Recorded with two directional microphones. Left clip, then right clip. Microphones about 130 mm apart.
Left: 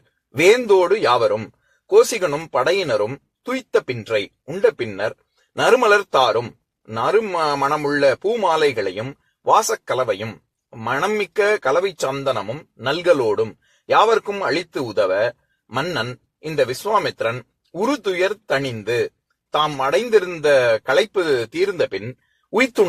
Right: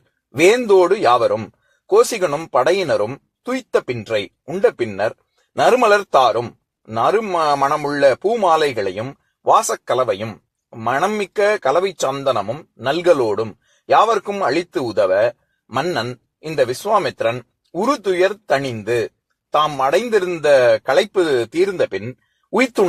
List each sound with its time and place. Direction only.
0.3 s a man's voice: 45° right (ahead or behind)